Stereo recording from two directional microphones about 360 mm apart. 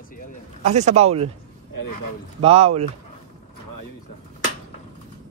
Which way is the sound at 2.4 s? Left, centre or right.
Centre.